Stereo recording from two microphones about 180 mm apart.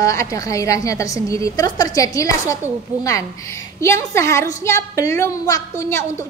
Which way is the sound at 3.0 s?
20° left (ahead or behind).